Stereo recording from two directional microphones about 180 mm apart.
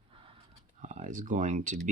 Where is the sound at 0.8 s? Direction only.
45° right (ahead or behind).